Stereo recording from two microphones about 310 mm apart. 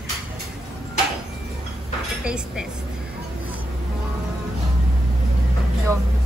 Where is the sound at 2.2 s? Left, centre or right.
Centre.